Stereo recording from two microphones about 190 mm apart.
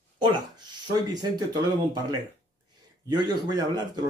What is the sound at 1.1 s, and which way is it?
Speech, 20° right (ahead or behind).